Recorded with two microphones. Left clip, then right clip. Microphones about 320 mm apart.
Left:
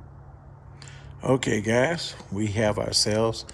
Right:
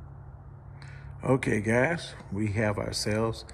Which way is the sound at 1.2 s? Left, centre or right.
Centre.